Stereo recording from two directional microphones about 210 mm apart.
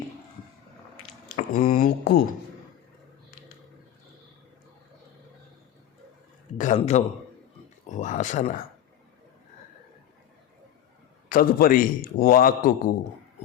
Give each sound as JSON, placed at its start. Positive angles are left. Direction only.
{"t": 1.4, "sound": "a man's voice", "side_deg": 40}
{"t": 6.6, "sound": "a man's voice", "side_deg": 35}
{"t": 11.3, "sound": "a man's voice", "side_deg": 40}